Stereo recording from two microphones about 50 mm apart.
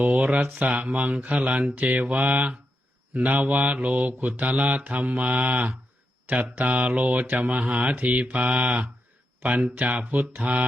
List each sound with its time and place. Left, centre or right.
0.0 s mantra: right